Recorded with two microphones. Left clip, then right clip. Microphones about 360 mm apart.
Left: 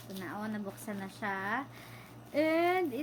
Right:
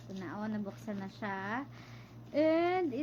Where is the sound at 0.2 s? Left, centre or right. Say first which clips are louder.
Left 1 dB; centre.